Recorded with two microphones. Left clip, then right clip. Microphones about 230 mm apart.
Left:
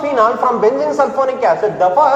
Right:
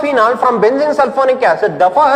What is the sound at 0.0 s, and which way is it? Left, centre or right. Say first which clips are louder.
A man's voice: right 2 dB; right.